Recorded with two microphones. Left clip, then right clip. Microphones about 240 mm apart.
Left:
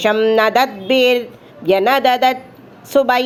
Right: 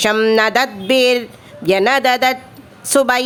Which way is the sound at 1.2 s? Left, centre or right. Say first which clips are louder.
Left 1 dB; right.